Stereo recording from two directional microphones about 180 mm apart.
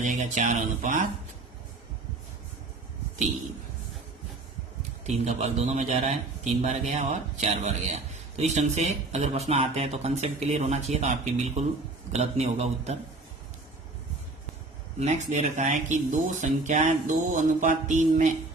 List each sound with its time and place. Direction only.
0.0 s music: 45° right (ahead or behind)
5.0 s a man's voice: 40° right (ahead or behind)
14.9 s a man's voice: 40° right (ahead or behind)
16.4 s music: 40° right (ahead or behind)